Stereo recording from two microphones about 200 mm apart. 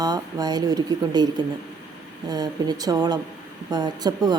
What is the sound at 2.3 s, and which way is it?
Speech, 20° right (ahead or behind).